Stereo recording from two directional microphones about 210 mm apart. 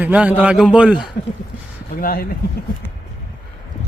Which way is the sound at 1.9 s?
45° left (ahead or behind).